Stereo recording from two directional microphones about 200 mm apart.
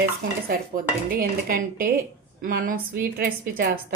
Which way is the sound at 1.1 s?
45° right (ahead or behind).